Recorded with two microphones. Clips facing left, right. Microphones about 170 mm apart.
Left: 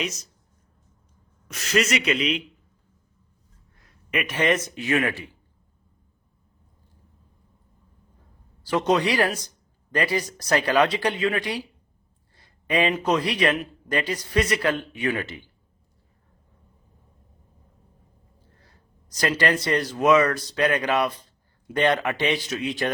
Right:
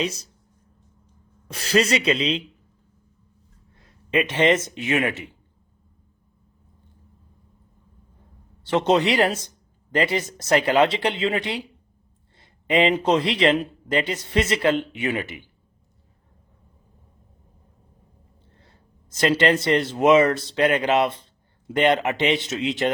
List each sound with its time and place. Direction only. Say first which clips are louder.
0.0 s speech: right 4 dB; 30° right (ahead or behind)
1.5 s speech: right 3 dB; 30° right (ahead or behind)
3.8 s speech: right 6 dB; 25° right (ahead or behind)
8.6 s speech: right 2 dB; 25° right (ahead or behind)
18.5 s speech: right 2 dB; 25° right (ahead or behind)